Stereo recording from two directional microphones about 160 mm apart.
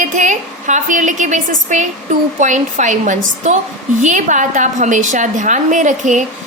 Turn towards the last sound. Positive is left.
turn(degrees=-50)  # may be behind; listen again after turning